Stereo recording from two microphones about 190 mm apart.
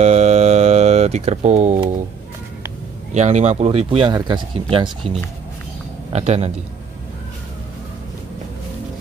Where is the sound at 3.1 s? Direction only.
35° right (ahead or behind).